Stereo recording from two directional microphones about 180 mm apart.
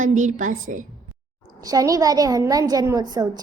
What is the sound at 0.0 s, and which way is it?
Speech, 45° right (ahead or behind).